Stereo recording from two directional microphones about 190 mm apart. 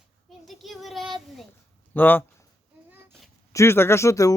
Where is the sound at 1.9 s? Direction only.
10° left (ahead or behind).